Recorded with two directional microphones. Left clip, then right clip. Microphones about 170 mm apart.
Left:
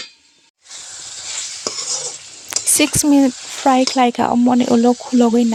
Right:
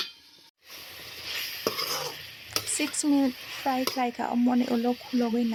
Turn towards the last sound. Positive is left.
turn(degrees=45)  # may be behind; listen again after turning